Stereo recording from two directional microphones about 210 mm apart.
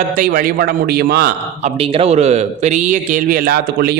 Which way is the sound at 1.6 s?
30° right (ahead or behind).